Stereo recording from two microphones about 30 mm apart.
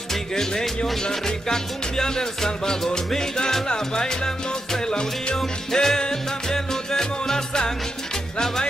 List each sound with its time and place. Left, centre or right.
0.1 s music: centre